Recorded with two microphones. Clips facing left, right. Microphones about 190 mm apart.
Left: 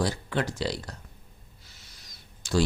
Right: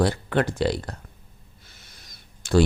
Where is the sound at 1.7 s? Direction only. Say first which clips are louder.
Right 4 dB; 55° right (ahead or behind).